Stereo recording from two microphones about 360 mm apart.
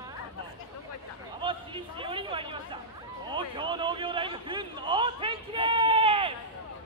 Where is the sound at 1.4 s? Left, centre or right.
Centre.